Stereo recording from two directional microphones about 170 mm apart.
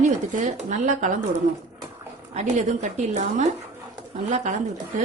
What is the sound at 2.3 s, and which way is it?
A woman's voice, 45° right (ahead or behind).